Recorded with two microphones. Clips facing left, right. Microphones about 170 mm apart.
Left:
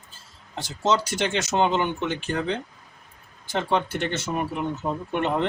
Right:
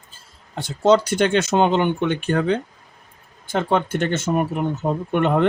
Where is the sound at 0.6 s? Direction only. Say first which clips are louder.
Right 7 dB; 55° right (ahead or behind).